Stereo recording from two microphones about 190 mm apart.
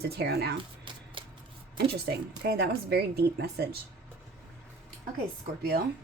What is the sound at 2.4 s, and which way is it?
Speech, 55° right (ahead or behind).